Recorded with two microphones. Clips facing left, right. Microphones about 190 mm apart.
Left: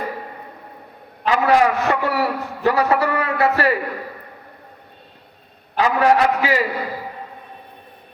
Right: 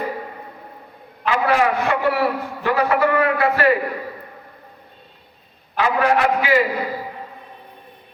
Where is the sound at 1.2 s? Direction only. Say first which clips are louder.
Left 2 dB; 40° left (ahead or behind).